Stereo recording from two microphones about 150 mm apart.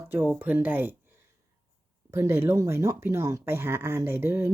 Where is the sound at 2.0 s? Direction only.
20° right (ahead or behind).